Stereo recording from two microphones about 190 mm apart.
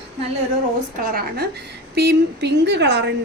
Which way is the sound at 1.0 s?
50° right (ahead or behind).